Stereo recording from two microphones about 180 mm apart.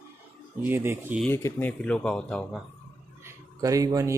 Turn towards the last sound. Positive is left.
turn(degrees=-20)  # may be behind; listen again after turning